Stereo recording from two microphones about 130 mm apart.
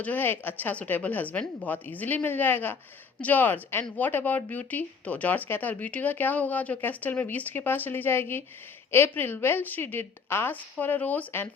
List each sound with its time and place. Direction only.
0.0 s speech: 15° left (ahead or behind)